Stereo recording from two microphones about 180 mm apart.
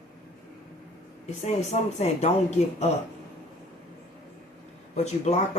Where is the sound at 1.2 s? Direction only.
35° left (ahead or behind).